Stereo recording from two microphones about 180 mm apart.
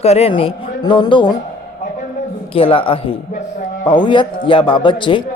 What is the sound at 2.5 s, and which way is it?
A man's voice, 30° left (ahead or behind).